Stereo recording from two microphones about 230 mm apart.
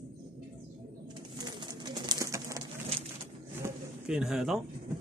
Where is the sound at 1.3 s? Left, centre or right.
Centre.